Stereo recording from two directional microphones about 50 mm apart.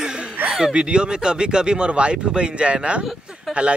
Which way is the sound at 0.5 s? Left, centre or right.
Centre.